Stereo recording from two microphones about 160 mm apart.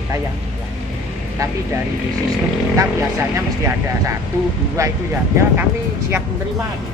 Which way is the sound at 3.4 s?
15° right (ahead or behind).